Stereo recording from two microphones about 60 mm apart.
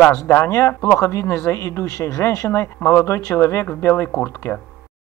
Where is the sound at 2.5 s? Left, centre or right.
Left.